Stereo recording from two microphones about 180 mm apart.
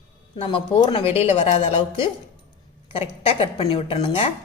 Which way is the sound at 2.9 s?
30° left (ahead or behind).